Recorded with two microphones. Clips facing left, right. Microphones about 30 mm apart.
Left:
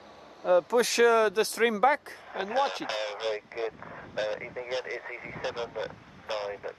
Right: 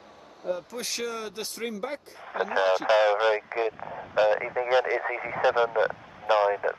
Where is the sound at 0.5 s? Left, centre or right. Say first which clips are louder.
Left 8 dB; left.